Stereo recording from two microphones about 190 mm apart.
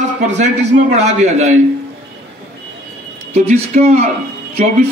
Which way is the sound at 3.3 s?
35° right (ahead or behind).